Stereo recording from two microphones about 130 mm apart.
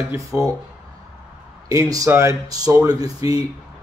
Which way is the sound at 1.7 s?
25° right (ahead or behind).